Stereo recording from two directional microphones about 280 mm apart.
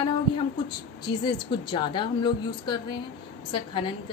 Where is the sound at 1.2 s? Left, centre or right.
Centre.